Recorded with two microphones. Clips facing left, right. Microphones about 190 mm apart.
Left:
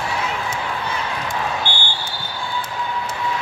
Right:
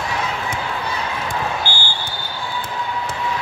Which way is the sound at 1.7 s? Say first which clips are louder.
Even; 20° left (ahead or behind).